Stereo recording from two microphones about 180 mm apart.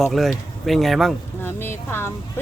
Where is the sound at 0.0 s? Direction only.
Centre (ahead or behind).